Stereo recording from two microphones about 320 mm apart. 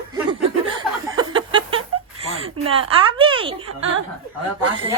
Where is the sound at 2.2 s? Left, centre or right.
Centre.